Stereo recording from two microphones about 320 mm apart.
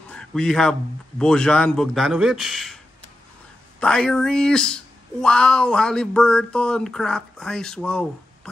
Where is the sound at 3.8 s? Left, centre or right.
Centre.